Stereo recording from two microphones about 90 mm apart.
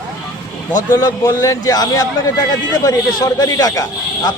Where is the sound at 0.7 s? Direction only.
40° left (ahead or behind).